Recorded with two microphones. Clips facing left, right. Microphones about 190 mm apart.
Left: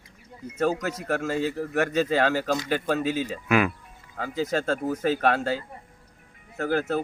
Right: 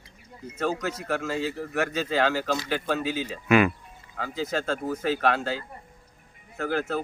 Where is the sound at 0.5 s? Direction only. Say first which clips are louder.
Left 3 dB; 45° left (ahead or behind).